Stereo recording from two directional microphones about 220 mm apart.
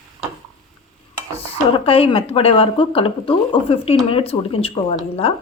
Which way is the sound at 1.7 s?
25° left (ahead or behind).